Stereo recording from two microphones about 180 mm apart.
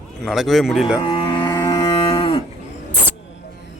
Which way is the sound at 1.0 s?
30° left (ahead or behind).